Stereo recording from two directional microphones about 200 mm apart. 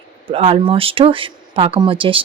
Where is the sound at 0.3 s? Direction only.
30° right (ahead or behind).